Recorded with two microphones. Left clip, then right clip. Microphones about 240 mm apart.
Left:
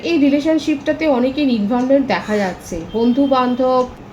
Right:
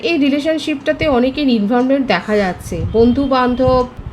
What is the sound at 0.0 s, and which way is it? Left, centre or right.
A woman's voice, right.